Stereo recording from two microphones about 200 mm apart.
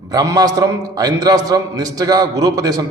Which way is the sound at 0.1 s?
20° right (ahead or behind).